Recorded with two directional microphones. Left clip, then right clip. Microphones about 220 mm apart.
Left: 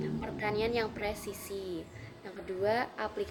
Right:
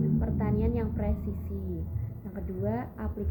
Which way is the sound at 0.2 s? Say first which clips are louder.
Even; 25° left (ahead or behind).